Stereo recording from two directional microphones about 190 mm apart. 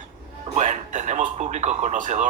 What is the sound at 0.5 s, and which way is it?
A man's voice, 40° right (ahead or behind).